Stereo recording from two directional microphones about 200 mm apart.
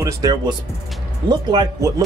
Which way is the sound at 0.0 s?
20° right (ahead or behind).